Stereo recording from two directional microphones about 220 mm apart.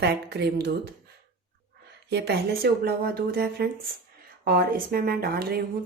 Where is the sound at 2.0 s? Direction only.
50° right (ahead or behind).